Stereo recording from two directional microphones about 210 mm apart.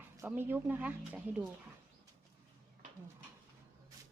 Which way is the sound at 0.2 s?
10° right (ahead or behind).